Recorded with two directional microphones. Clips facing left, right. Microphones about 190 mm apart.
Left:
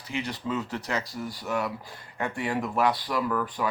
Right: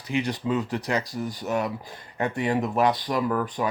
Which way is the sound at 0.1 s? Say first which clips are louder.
Right 5 dB; 15° right (ahead or behind).